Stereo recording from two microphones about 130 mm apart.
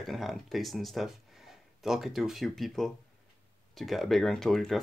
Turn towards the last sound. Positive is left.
turn(degrees=5)  # may be behind; listen again after turning